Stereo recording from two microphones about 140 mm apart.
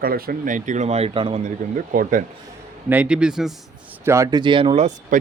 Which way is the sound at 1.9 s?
80° right.